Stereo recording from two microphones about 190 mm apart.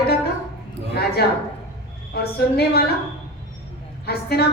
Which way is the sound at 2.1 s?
55° left (ahead or behind).